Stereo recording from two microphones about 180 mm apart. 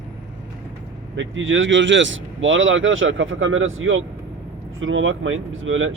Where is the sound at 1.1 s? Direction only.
90° right.